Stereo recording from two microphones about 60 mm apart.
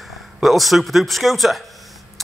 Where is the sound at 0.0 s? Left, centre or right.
Centre.